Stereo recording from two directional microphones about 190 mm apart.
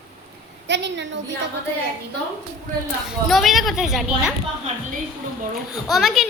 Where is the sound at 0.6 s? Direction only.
65° right (ahead or behind).